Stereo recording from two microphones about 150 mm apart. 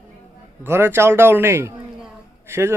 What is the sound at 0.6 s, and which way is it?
A man's voice, 15° right (ahead or behind).